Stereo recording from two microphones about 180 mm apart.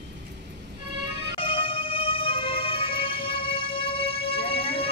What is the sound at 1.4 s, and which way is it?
Music, 30° left (ahead or behind).